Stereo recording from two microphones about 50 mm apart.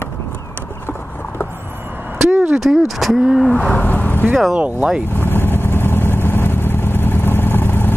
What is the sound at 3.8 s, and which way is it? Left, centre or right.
Vehicle, left.